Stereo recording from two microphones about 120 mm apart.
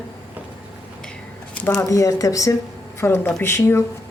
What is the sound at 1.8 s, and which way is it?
Speech, 25° left (ahead or behind).